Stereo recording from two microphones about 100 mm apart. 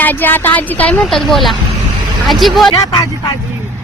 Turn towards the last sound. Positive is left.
turn(degrees=40)  # may be behind; listen again after turning